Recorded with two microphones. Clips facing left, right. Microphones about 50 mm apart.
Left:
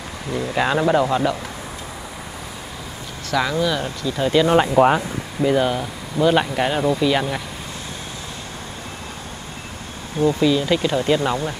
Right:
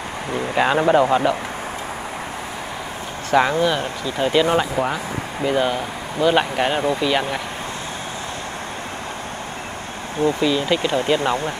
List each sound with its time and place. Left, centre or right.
0.6 s speech: centre
3.3 s speech: right
4.0 s speech: centre
4.7 s speech: left
5.4 s speech: centre
10.2 s speech: right
10.6 s speech: centre